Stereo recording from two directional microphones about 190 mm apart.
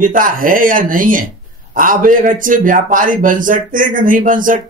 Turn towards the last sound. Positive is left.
turn(degrees=-45)  # may be behind; listen again after turning